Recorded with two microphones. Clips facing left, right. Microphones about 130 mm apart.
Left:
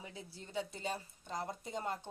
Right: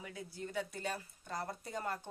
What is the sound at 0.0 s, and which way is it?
A woman's voice, 25° left (ahead or behind).